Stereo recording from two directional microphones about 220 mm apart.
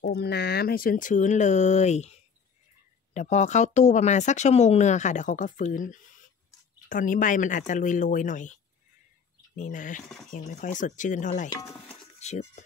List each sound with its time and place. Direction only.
0.0 s speech: 50° left (ahead or behind)
9.6 s speech: 35° left (ahead or behind)
11.9 s music: 30° left (ahead or behind)